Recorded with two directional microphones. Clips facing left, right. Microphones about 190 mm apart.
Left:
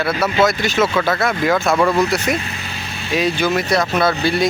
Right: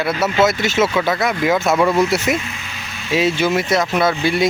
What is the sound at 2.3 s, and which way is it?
Speech, 20° right (ahead or behind).